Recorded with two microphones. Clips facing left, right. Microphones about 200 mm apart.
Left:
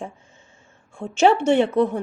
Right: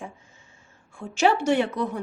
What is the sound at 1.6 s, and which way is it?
Speech, 60° left (ahead or behind).